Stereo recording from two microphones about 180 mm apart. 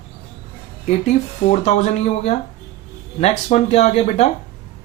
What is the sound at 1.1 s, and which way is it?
Speech, 35° left (ahead or behind).